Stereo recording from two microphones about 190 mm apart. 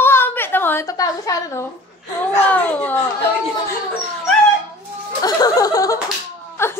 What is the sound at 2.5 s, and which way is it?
Speech, 10° left (ahead or behind).